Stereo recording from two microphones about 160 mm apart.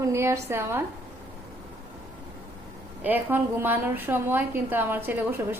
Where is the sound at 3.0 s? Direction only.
10° right (ahead or behind).